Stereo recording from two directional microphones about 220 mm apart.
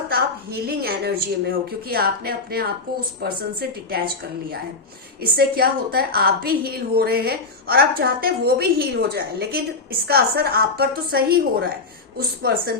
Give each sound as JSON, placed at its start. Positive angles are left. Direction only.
{"t": 0.1, "sound": "a woman's voice", "side_deg": -45}
{"t": 5.2, "sound": "a woman's voice", "side_deg": -45}